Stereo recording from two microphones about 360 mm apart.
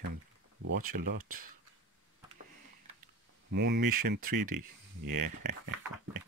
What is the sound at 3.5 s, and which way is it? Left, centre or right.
Speech, right.